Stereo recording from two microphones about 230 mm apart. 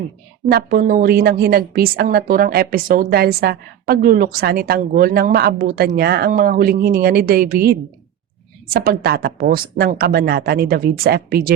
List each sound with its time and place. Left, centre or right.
0.4 s a woman's voice: right